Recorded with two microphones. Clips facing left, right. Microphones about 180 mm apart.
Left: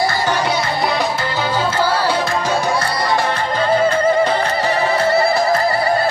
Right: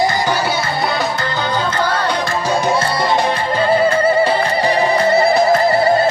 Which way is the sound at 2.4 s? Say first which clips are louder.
Right 2 dB; 15° right (ahead or behind).